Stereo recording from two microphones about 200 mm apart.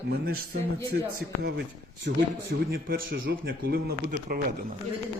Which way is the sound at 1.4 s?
55° right (ahead or behind).